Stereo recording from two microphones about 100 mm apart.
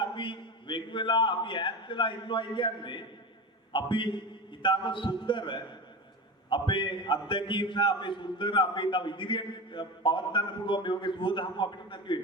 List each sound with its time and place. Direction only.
0.0 s a man's voice: 55° left (ahead or behind)